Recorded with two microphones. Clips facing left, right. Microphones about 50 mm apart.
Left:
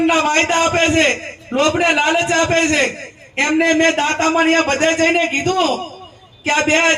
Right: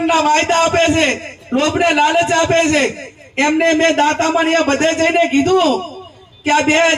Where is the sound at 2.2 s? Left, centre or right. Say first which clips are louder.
Right 2 dB; left.